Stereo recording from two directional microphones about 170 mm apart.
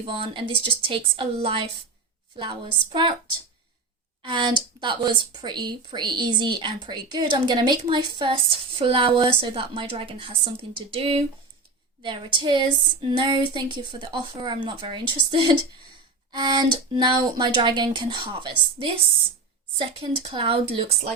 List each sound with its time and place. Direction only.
0.0 s speech: 30° right (ahead or behind)
4.2 s speech: 30° right (ahead or behind)